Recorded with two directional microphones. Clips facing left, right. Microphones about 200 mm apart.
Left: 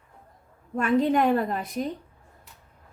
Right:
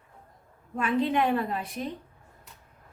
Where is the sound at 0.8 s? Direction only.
45° left (ahead or behind).